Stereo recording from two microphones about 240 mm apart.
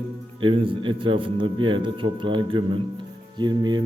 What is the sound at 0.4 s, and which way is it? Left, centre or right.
A man's voice, right.